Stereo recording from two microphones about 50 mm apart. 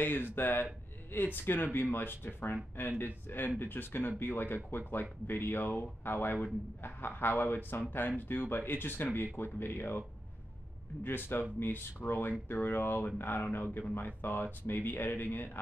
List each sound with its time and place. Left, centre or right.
0.0 s speech: left
11.1 s speech: left